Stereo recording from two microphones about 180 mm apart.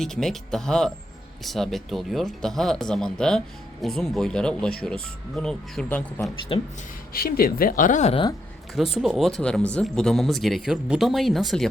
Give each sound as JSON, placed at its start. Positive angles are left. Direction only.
{"t": 0.0, "sound": "speech", "side_deg": 0}
{"t": 7.1, "sound": "speech", "side_deg": 55}
{"t": 8.7, "sound": "speech", "side_deg": 0}